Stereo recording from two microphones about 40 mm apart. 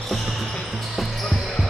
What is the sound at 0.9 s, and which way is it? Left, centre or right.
Basketball bounce, centre.